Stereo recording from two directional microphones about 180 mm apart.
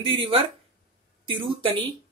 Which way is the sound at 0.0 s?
30° right (ahead or behind).